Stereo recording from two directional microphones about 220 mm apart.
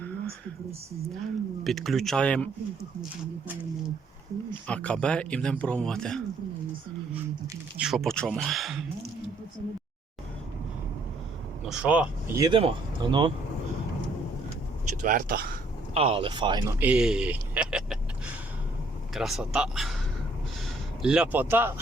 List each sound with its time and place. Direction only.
1.6 s speech: centre (ahead or behind)
4.7 s speech: 5° left (ahead or behind)
7.8 s speech: centre (ahead or behind)
11.7 s speech: 5° right (ahead or behind)
12.5 s speech: 20° right (ahead or behind)
15.0 s speech: 40° right (ahead or behind)
16.0 s speech: 25° right (ahead or behind)
16.8 s speech: 5° right (ahead or behind)
19.1 s speech: centre (ahead or behind)
21.0 s speech: 5° right (ahead or behind)